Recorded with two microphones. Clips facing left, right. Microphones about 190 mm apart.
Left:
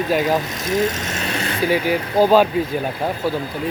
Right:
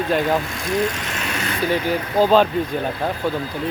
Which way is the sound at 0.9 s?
45° left (ahead or behind).